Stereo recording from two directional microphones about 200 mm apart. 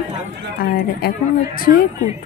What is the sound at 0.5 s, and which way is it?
A woman's voice, 45° left (ahead or behind).